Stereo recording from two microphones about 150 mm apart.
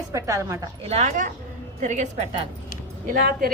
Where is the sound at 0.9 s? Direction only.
50° right (ahead or behind).